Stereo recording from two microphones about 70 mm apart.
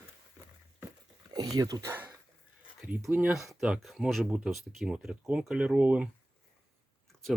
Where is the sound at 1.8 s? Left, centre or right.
Right.